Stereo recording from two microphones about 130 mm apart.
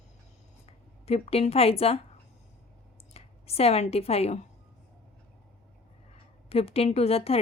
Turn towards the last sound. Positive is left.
turn(degrees=50)  # may be behind; listen again after turning